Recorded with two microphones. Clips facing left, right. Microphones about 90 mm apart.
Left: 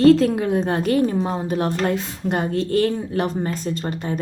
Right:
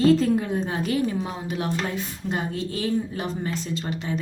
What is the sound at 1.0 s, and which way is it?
Speech, 40° left (ahead or behind).